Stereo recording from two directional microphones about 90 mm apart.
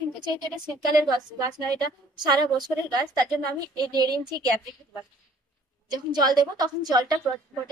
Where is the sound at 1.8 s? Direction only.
50° right (ahead or behind).